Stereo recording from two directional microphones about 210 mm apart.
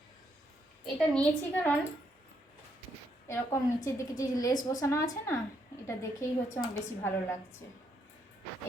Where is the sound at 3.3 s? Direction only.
15° left (ahead or behind).